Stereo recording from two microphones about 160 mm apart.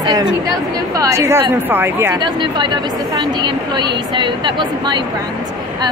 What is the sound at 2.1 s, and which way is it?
A woman's voice, 30° right (ahead or behind).